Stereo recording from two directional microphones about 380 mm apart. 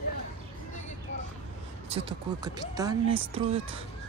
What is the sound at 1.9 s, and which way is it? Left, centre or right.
Speech, centre.